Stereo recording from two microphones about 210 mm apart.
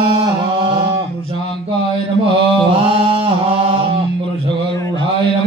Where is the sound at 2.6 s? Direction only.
25° right (ahead or behind).